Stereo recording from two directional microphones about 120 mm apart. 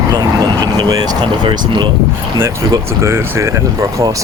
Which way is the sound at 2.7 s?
25° right (ahead or behind).